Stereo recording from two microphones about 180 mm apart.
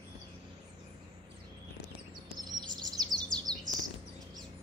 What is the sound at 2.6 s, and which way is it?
Chirp, 20° right (ahead or behind).